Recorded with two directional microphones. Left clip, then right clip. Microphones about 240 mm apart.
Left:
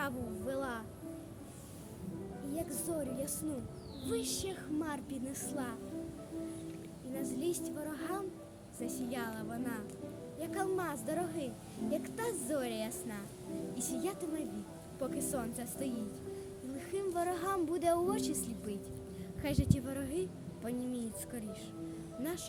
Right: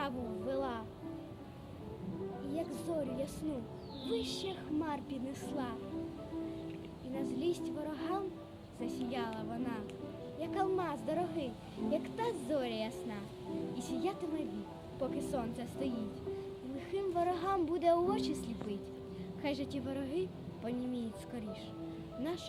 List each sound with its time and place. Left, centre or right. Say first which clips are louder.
0.0 s a sound: even; centre
2.7 s a child's voice: right 1 dB; centre
7.1 s a child's voice: right 1 dB; centre